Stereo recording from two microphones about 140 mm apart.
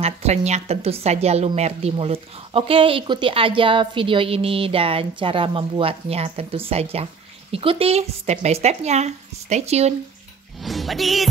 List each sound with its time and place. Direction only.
0.0 s a woman's voice: 50° right (ahead or behind)
10.6 s speech: centre (ahead or behind)